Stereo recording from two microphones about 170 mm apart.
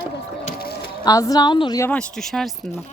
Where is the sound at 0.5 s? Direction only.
65° left (ahead or behind).